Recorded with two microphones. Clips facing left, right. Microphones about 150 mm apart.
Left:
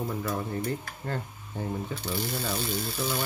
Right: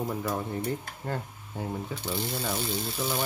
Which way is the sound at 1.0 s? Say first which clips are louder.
Left 1 dB; 10° right (ahead or behind).